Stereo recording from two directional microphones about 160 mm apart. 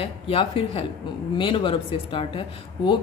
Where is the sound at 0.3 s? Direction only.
35° left (ahead or behind).